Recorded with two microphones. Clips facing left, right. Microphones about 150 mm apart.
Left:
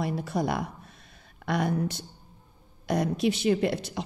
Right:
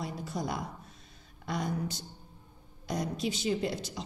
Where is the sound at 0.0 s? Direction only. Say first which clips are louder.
Left 7 dB; 65° left (ahead or behind).